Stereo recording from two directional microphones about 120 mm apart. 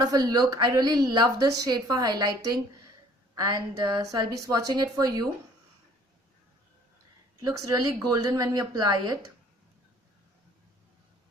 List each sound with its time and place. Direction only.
0.0 s a woman's voice: 30° right (ahead or behind)
7.3 s a woman's voice: 30° right (ahead or behind)